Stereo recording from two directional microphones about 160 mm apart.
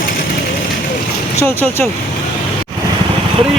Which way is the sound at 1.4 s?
10° left (ahead or behind).